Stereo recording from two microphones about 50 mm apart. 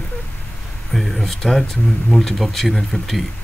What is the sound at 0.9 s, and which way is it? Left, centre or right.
Speech, centre.